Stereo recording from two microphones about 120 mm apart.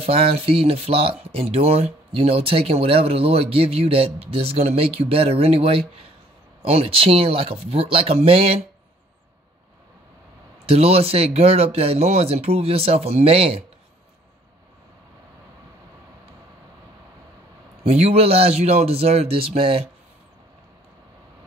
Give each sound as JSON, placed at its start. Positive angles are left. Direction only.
{"t": 0.0, "sound": "speech", "side_deg": -55}
{"t": 10.6, "sound": "speech", "side_deg": -55}
{"t": 17.8, "sound": "speech", "side_deg": -60}